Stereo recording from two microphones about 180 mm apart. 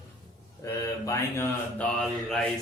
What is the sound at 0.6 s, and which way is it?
Speech, 15° left (ahead or behind).